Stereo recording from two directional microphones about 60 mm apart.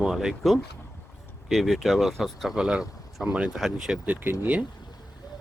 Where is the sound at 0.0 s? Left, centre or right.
Centre.